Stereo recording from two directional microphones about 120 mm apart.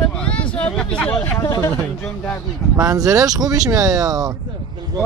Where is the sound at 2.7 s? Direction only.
30° right (ahead or behind).